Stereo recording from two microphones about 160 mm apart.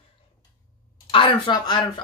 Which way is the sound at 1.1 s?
30° left (ahead or behind).